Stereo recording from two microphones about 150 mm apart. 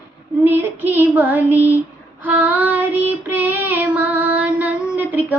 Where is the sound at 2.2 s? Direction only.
10° right (ahead or behind).